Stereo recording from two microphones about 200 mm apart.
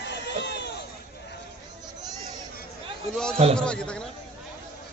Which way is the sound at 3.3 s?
30° right (ahead or behind).